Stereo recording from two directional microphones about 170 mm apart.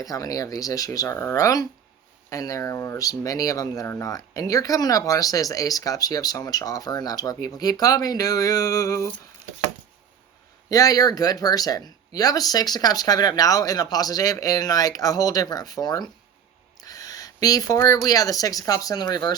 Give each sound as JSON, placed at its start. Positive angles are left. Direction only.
{"t": 0.0, "sound": "speech", "side_deg": 20}
{"t": 10.7, "sound": "speech", "side_deg": 20}